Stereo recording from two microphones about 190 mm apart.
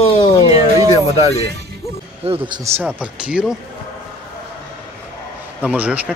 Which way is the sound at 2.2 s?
25° right (ahead or behind).